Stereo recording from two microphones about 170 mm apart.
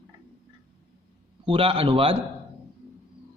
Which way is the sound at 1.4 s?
35° right (ahead or behind).